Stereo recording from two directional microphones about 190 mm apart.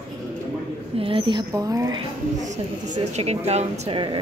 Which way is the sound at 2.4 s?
40° right (ahead or behind).